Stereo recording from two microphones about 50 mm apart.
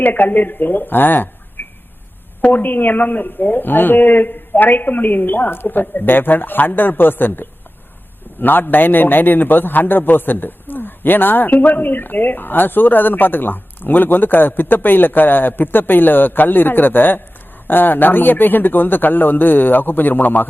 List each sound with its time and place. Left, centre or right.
0.0 s a man's voice: left
1.6 s a sound: left
2.4 s a man's voice: left